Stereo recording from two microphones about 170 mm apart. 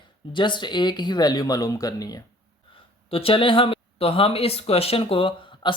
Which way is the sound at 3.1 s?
35° left (ahead or behind).